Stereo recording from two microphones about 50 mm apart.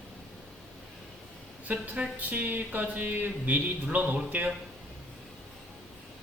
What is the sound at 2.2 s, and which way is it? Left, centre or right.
Speech, right.